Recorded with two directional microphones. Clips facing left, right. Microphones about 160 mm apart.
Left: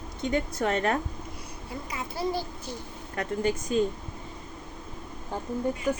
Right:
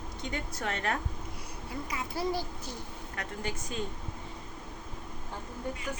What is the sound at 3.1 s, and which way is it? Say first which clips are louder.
Speech: left 10 dB; 45° left (ahead or behind).